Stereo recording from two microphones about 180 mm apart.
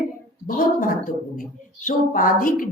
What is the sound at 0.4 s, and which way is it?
A woman's voice, 50° left (ahead or behind).